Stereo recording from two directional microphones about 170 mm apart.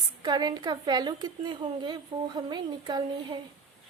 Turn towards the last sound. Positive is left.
turn(degrees=-25)  # may be behind; listen again after turning